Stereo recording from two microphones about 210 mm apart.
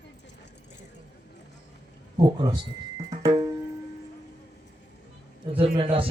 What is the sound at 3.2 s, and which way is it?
Music, 20° right (ahead or behind).